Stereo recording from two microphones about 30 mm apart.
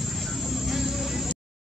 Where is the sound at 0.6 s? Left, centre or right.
Centre.